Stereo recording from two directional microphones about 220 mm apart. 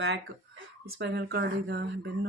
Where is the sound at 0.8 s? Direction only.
50° right (ahead or behind).